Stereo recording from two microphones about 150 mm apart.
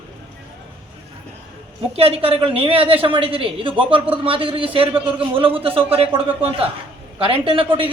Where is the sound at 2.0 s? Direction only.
40° right (ahead or behind).